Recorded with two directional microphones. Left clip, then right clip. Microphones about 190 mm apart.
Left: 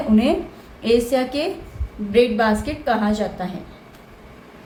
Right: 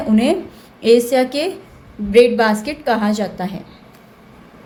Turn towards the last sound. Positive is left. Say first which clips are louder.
# right 2 dB
turn(degrees=-40)  # may be behind; listen again after turning